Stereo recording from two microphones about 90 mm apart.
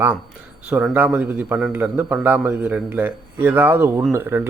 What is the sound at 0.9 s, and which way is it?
A man's voice, 20° right (ahead or behind).